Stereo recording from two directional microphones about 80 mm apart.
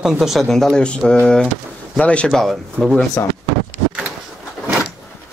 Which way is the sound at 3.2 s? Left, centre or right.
Left.